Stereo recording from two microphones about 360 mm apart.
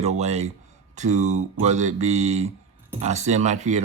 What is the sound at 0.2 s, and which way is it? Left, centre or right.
Speech, centre.